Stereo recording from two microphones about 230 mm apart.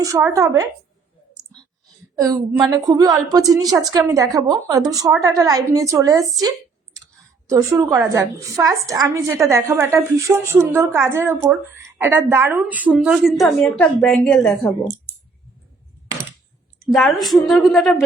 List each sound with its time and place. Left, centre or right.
0.0 s a woman's voice: centre
2.1 s a woman's voice: centre
7.4 s a woman's voice: centre
16.9 s a woman's voice: centre